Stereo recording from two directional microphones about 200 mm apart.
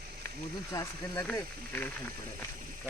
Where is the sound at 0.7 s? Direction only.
15° left (ahead or behind).